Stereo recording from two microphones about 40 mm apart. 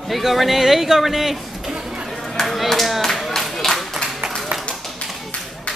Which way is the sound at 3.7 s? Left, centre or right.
Centre.